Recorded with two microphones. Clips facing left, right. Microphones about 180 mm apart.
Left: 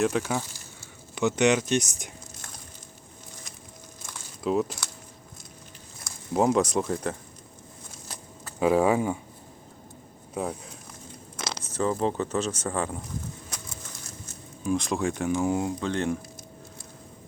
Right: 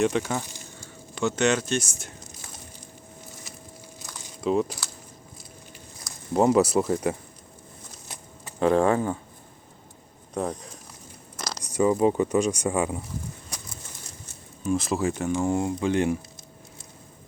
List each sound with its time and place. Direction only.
0.0 s speech: centre (ahead or behind)
1.1 s speech: 15° left (ahead or behind)
4.4 s speech: centre (ahead or behind)
6.3 s speech: centre (ahead or behind)
8.5 s speech: 5° left (ahead or behind)
10.3 s speech: 5° left (ahead or behind)
11.6 s speech: 10° right (ahead or behind)
14.6 s speech: 5° right (ahead or behind)
15.8 s speech: 10° right (ahead or behind)